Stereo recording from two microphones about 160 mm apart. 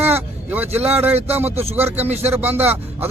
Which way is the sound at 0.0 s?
10° right (ahead or behind).